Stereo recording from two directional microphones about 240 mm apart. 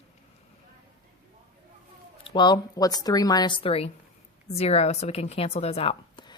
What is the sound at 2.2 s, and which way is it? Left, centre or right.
A woman's voice, centre.